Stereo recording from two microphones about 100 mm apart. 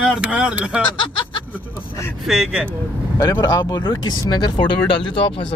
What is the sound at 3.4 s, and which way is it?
Speech, 45° left (ahead or behind).